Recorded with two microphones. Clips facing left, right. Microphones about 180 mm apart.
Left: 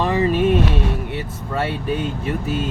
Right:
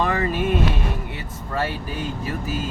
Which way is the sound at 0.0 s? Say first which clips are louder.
Left 5 dB; 25° left (ahead or behind).